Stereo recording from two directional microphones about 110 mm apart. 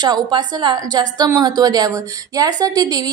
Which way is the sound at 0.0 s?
40° right (ahead or behind).